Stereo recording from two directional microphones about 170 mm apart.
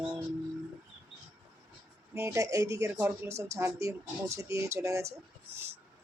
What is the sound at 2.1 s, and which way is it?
Speech, 15° right (ahead or behind).